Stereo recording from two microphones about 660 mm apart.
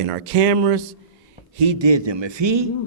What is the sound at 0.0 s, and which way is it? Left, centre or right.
A man's voice, right.